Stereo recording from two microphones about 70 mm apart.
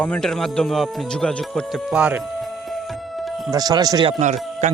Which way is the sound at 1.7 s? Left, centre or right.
Centre.